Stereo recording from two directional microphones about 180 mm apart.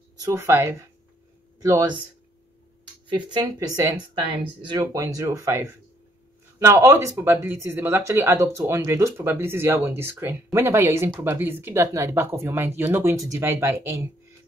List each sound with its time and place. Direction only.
0.2 s speech: 15° right (ahead or behind)
3.3 s speech: 20° right (ahead or behind)